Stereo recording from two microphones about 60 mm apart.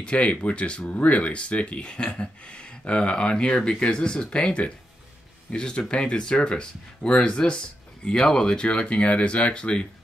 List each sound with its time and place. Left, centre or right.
0.0 s speech: left